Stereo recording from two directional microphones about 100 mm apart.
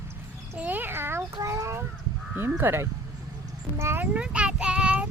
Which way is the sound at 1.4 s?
35° right (ahead or behind).